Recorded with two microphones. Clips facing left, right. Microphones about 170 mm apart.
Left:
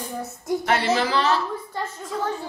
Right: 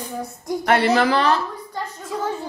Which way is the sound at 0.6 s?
60° right (ahead or behind).